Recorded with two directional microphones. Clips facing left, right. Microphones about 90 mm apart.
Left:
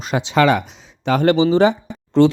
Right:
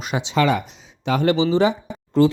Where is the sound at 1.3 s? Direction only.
55° left (ahead or behind); by 2.3 s 70° left (ahead or behind).